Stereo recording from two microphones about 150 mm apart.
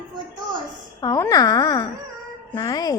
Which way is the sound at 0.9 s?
25° left (ahead or behind).